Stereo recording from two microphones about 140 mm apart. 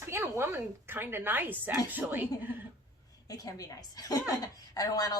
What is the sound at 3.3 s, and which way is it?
A woman's voice, 25° left (ahead or behind).